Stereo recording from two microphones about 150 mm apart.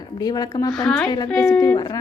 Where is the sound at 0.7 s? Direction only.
5° left (ahead or behind).